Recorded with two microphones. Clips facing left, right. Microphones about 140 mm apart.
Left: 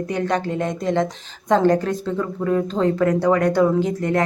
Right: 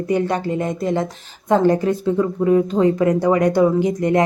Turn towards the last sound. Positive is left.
turn(degrees=-15)  # may be behind; listen again after turning